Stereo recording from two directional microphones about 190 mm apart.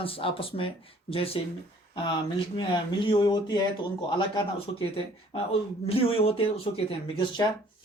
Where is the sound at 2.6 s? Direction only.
25° left (ahead or behind).